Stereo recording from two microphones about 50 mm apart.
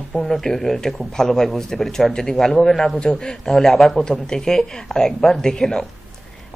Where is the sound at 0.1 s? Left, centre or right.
Centre.